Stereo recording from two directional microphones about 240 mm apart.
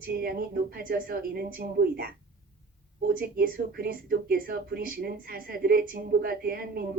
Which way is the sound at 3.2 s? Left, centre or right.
Right.